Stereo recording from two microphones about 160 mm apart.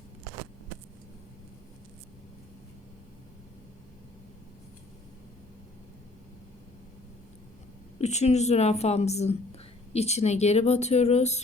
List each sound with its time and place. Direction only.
8.0 s speech: 45° left (ahead or behind)